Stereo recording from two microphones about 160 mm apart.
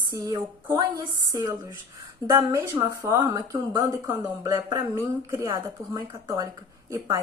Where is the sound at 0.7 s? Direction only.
20° right (ahead or behind).